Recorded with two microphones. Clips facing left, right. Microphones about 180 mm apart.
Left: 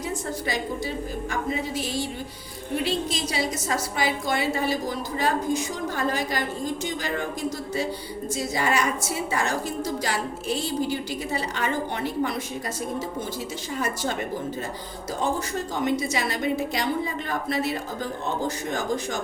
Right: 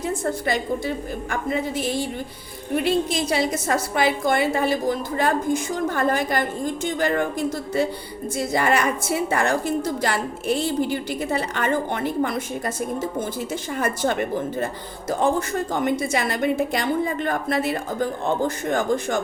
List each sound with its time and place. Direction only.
0.0 s a woman's voice: 55° right (ahead or behind)
8.4 s a woman's voice: 55° right (ahead or behind)